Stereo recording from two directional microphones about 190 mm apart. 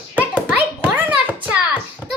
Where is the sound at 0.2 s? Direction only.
5° right (ahead or behind).